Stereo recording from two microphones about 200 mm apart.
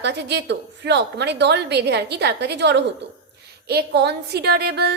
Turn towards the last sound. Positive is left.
turn(degrees=-55)  # may be behind; listen again after turning